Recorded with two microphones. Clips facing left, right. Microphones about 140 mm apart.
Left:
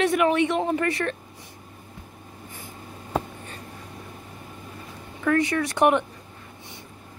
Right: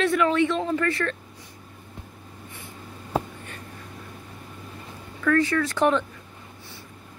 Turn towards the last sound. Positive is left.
turn(degrees=20)  # may be behind; listen again after turning